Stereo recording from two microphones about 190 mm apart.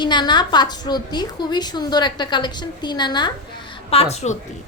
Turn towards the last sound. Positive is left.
turn(degrees=35)  # may be behind; listen again after turning